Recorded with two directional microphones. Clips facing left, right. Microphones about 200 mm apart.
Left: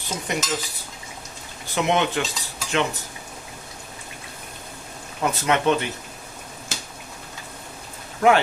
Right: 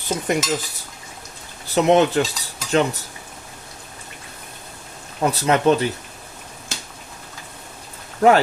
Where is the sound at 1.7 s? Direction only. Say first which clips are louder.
Right 7 dB; 35° right (ahead or behind).